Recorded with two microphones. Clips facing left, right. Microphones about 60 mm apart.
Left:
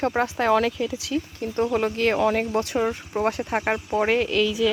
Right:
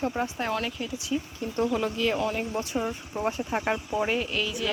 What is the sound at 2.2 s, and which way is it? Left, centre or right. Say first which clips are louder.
Speech: left 7 dB; left.